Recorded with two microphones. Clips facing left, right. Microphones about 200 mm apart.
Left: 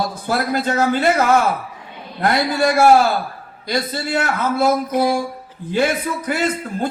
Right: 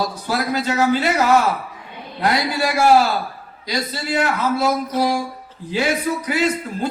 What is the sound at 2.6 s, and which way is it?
Speech, 50° left (ahead or behind).